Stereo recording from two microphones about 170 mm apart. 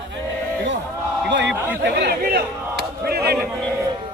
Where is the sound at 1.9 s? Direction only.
70° right (ahead or behind).